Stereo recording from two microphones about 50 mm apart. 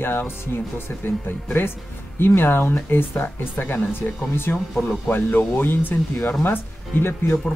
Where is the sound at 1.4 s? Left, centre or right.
Left.